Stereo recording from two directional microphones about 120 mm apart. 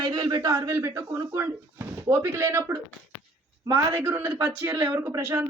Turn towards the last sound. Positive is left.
turn(degrees=-20)  # may be behind; listen again after turning